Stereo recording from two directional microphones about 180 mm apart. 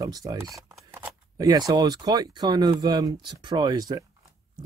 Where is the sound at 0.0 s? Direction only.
20° right (ahead or behind).